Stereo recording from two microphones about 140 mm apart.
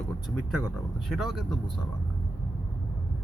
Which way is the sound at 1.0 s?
Centre (ahead or behind).